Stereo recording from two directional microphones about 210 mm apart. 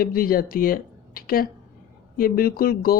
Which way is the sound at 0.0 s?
45° left (ahead or behind).